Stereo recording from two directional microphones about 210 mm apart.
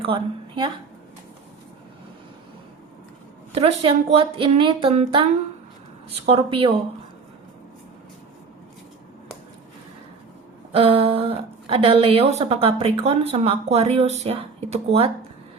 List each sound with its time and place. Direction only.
0.0 s a woman's voice: 25° right (ahead or behind)
3.5 s a woman's voice: 30° right (ahead or behind)
6.2 s a woman's voice: 25° right (ahead or behind)
10.7 s a woman's voice: 25° right (ahead or behind)